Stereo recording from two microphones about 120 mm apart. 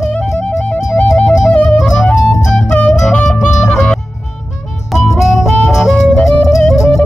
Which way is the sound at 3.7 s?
5° left (ahead or behind).